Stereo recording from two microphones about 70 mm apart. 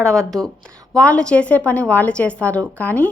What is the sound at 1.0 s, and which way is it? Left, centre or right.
A woman's voice, centre.